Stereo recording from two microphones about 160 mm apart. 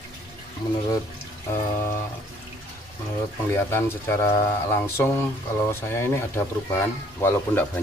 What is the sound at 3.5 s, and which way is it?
Speech, 15° left (ahead or behind).